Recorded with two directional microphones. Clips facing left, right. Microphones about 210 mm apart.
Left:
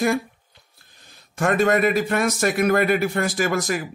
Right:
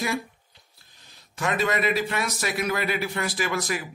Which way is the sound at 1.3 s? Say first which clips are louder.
Left 7 dB; 50° left (ahead or behind).